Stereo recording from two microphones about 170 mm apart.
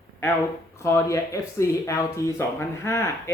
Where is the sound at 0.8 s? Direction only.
15° left (ahead or behind).